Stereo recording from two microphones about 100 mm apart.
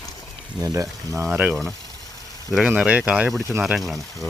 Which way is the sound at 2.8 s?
10° right (ahead or behind).